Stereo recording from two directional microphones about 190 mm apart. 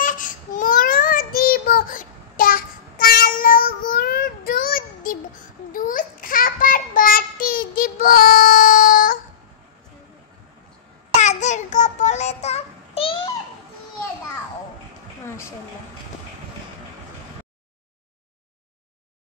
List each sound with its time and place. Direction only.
0.0 s child singing: 45° left (ahead or behind)
11.1 s child singing: 40° left (ahead or behind)
15.2 s a sound: 15° left (ahead or behind)